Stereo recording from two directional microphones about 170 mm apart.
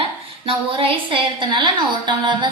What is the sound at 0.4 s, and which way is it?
A woman's voice, 30° right (ahead or behind).